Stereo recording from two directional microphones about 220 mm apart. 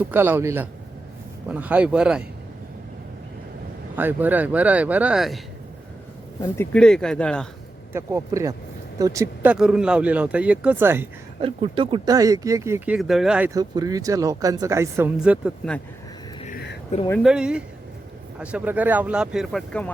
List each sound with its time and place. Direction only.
0.0 s speech: 10° right (ahead or behind)
3.9 s speech: 10° right (ahead or behind)
6.4 s speech: 5° left (ahead or behind)
7.9 s speech: 15° right (ahead or behind)
11.3 s speech: 25° right (ahead or behind); by 15.8 s centre (ahead or behind)
16.9 s speech: 30° left (ahead or behind)
17.2 s speech: 5° right (ahead or behind)